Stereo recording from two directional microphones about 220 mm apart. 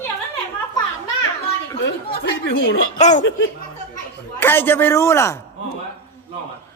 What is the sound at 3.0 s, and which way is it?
Speech, 35° left (ahead or behind).